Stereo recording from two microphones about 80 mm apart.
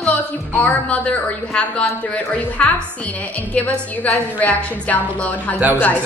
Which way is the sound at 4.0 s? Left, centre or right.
Centre.